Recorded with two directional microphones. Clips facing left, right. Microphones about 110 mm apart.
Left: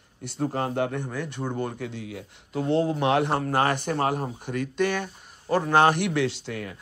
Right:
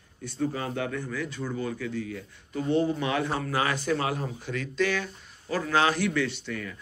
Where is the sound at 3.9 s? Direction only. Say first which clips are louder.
Left 2 dB; 45° left (ahead or behind); by 6.4 s 65° left (ahead or behind).